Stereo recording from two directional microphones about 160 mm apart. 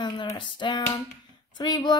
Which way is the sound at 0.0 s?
30° left (ahead or behind).